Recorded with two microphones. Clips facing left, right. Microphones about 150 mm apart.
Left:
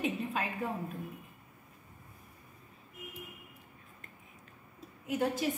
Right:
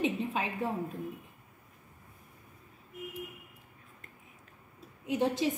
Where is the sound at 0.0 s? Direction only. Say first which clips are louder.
Right 3 dB; 20° right (ahead or behind).